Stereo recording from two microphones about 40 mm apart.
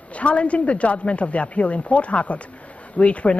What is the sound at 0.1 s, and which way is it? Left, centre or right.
Speech, left.